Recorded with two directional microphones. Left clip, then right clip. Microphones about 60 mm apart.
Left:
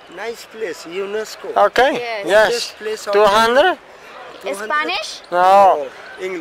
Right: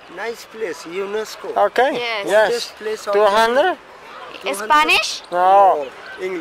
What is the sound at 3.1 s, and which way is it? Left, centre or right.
Speech, left.